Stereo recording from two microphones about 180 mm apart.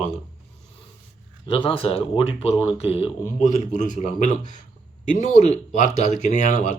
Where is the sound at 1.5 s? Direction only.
30° left (ahead or behind).